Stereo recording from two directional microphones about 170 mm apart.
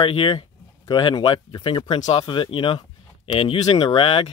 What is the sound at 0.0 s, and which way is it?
Speech, 30° left (ahead or behind).